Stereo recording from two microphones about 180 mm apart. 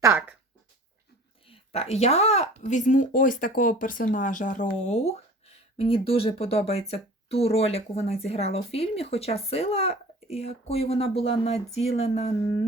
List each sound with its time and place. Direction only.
0.0 s speech: 10° right (ahead or behind)
1.5 s speech: 35° left (ahead or behind)